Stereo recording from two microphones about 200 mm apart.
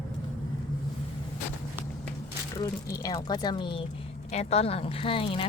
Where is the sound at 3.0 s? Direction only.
20° left (ahead or behind).